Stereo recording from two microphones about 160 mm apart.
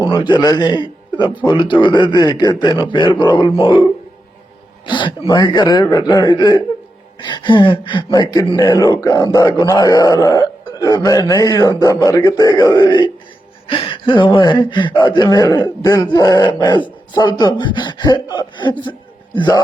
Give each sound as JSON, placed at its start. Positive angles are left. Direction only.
{"t": 0.0, "sound": "a man's voice", "side_deg": 30}
{"t": 4.9, "sound": "speech", "side_deg": 30}